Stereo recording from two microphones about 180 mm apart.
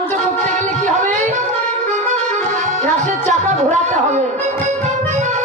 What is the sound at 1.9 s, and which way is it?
Accordion, 40° right (ahead or behind).